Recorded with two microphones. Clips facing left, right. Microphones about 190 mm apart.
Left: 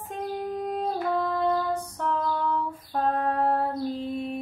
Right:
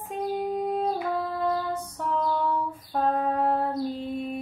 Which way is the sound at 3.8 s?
Centre (ahead or behind).